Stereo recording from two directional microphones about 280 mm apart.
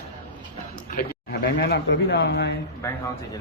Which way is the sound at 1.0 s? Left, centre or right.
Left.